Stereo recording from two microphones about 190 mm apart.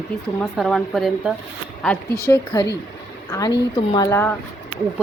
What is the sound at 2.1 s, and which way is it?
A woman's voice, 15° left (ahead or behind).